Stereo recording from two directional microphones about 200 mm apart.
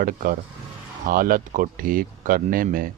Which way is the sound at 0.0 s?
45° right (ahead or behind).